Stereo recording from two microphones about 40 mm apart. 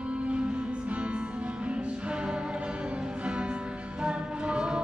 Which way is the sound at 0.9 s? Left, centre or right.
Right.